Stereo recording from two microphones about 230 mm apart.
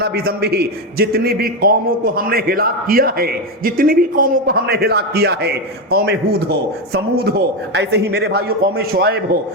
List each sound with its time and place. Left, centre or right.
0.0 s a man's voice: right